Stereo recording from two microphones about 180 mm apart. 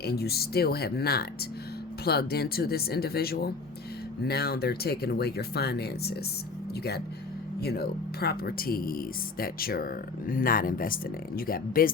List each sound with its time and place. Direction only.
0.0 s speech: 60° left (ahead or behind)
7.6 s speech: 60° left (ahead or behind)